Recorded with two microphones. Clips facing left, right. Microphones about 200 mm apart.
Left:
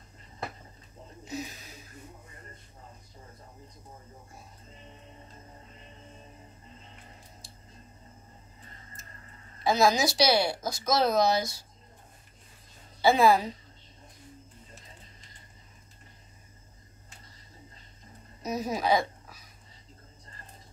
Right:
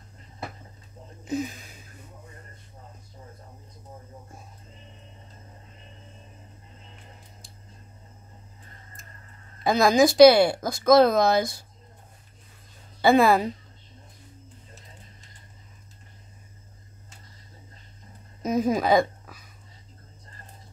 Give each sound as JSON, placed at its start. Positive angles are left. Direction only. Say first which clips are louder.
{"t": 1.3, "sound": "a sound", "louder": "right 9 dB", "side_deg": -50}
{"t": 9.6, "sound": "speech", "louder": "right 5 dB", "side_deg": -55}
{"t": 13.0, "sound": "speech", "louder": "right 3 dB", "side_deg": -55}
{"t": 18.5, "sound": "speech", "louder": "right 6 dB", "side_deg": -50}